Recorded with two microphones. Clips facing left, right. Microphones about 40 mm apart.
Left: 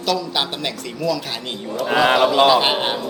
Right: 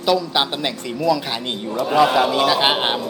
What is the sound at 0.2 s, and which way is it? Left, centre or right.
A man's voice, centre.